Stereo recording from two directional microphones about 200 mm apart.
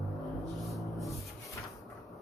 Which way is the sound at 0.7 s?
Centre (ahead or behind).